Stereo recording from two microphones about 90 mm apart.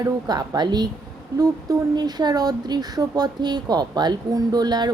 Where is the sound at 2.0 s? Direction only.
50° right (ahead or behind).